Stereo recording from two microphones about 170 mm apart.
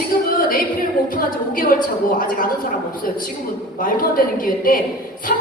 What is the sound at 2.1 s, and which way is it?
Speech, 55° left (ahead or behind).